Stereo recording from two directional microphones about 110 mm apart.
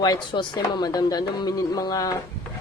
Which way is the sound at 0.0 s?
40° left (ahead or behind).